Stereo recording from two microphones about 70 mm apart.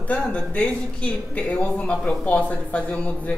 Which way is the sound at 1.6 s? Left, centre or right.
Centre.